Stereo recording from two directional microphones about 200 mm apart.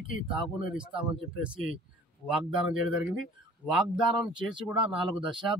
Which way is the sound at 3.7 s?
5° right (ahead or behind).